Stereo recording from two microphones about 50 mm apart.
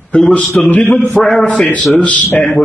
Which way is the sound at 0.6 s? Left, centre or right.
Left.